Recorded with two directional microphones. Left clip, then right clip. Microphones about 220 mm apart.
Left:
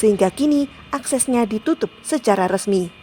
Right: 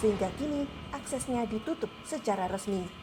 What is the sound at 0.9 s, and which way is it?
A woman's voice, 50° left (ahead or behind).